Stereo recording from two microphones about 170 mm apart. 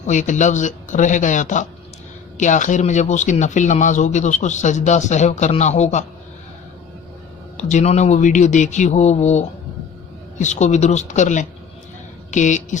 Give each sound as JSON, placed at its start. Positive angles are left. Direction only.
{"t": 0.1, "sound": "speech", "side_deg": 45}
{"t": 7.5, "sound": "speech", "side_deg": 45}